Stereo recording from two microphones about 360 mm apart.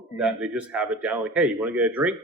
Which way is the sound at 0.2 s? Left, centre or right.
Centre.